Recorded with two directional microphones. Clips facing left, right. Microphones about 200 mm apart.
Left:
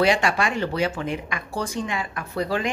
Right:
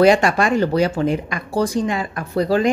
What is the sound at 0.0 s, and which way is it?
Speech, 45° right (ahead or behind).